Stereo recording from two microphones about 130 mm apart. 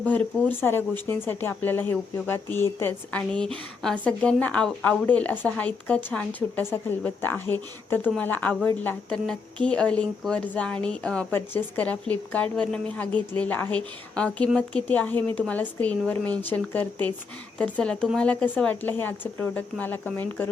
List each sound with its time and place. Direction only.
0.0 s a woman's voice: 15° left (ahead or behind)
3.1 s a woman's voice: 10° left (ahead or behind)